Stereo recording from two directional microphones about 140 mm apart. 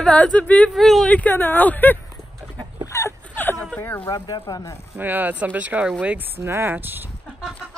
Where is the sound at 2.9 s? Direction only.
20° left (ahead or behind).